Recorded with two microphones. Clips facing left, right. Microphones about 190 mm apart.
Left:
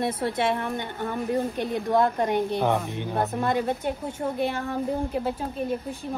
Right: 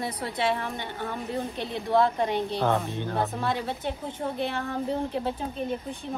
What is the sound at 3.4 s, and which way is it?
Speech, 50° left (ahead or behind).